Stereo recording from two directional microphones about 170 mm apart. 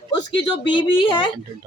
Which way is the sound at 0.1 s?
25° left (ahead or behind).